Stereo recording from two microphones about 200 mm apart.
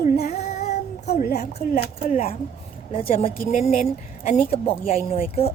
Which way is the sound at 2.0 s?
30° left (ahead or behind).